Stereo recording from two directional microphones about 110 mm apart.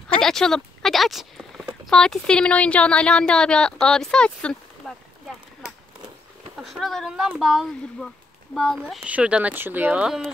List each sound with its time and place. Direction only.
0.2 s speech: 5° left (ahead or behind)
6.5 s speech: centre (ahead or behind)
9.0 s speech: 10° right (ahead or behind)